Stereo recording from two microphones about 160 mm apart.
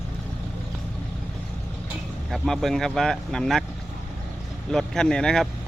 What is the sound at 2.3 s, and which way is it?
Speech, centre (ahead or behind).